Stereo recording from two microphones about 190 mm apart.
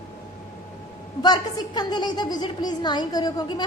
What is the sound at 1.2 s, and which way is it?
A woman's voice, 20° left (ahead or behind).